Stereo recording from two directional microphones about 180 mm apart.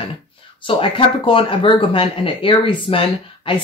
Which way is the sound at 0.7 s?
30° left (ahead or behind).